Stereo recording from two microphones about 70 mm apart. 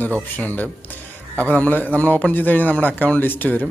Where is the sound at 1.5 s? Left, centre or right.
Left.